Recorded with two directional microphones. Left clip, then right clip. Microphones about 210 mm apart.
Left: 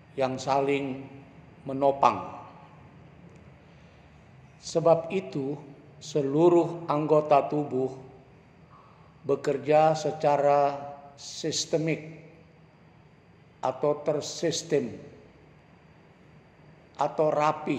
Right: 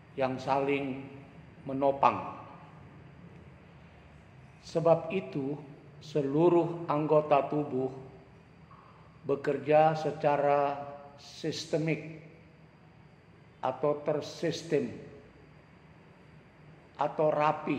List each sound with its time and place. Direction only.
0.1 s a man's voice: 35° left (ahead or behind)
4.6 s a man's voice: 35° left (ahead or behind)
9.2 s a man's voice: 35° left (ahead or behind)
13.6 s a man's voice: 35° left (ahead or behind)
16.9 s a man's voice: 35° left (ahead or behind)